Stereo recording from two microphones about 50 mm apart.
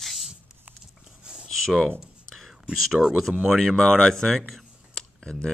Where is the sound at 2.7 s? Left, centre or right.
Centre.